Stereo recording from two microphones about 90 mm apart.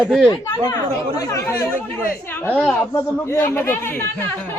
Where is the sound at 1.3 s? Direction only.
30° left (ahead or behind).